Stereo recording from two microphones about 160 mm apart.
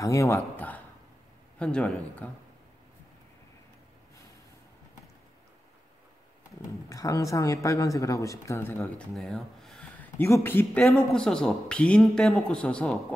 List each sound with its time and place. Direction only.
0.0 s a man's voice: 20° left (ahead or behind)
6.9 s a man's voice: 20° left (ahead or behind)